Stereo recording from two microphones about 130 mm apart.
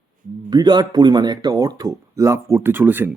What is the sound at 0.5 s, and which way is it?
Speech, 30° right (ahead or behind).